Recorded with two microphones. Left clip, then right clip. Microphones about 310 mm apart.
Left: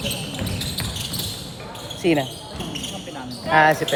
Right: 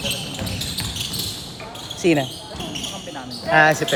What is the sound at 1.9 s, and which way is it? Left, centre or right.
Speech, right.